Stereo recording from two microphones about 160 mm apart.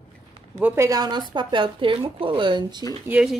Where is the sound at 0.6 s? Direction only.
10° right (ahead or behind).